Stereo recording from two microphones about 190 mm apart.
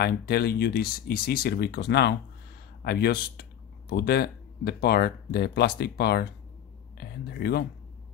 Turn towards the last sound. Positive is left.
turn(degrees=55)  # may be behind; listen again after turning